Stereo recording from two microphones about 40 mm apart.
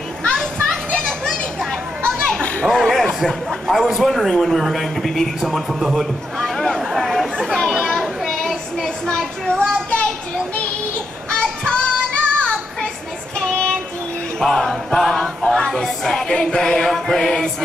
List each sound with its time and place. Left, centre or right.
0.3 s children playing: left
2.7 s a sound: centre
3.6 s speech: centre
6.4 s a sound: centre
6.8 s chatter: centre
7.9 s child singing: centre
9.0 s child singing: left
14.4 s a sound: centre
16.1 s music: centre